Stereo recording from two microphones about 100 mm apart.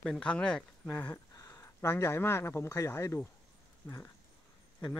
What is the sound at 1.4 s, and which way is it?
Speech, 25° left (ahead or behind).